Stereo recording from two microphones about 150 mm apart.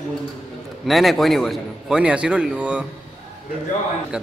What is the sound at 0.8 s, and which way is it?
A man's voice, centre (ahead or behind).